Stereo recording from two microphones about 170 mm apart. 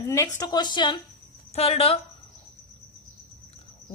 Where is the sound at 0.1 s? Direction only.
20° left (ahead or behind).